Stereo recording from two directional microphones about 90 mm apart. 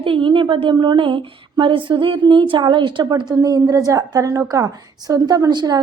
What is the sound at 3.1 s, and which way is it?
A woman's voice, 45° right (ahead or behind).